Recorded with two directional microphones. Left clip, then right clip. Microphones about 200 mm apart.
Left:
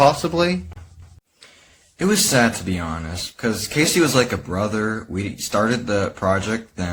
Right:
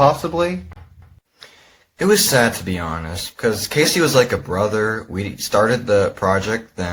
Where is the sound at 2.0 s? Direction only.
Centre (ahead or behind).